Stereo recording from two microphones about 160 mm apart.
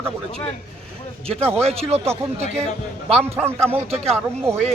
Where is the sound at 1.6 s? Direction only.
40° right (ahead or behind).